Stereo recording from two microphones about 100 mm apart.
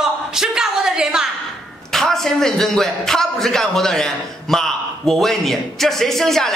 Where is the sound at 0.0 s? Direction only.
5° right (ahead or behind).